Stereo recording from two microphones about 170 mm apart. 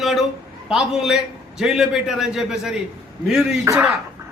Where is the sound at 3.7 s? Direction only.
15° right (ahead or behind).